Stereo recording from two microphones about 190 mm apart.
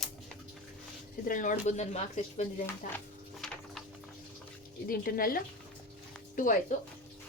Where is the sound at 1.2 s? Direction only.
45° left (ahead or behind).